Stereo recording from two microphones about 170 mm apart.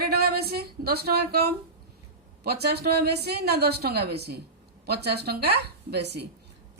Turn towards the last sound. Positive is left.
turn(degrees=-75)  # may be behind; listen again after turning